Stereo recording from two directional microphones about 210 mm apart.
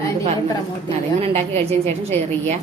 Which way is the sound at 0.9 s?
30° right (ahead or behind).